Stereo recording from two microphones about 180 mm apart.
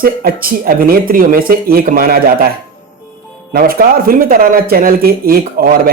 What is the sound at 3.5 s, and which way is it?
Speech, 55° right (ahead or behind).